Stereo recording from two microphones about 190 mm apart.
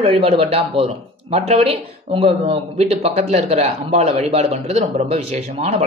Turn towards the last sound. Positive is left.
turn(degrees=-35)  # may be behind; listen again after turning